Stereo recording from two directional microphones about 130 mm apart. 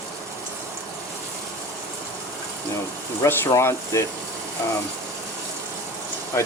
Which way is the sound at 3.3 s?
20° left (ahead or behind).